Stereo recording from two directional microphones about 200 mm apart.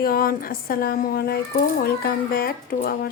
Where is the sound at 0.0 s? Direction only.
45° left (ahead or behind).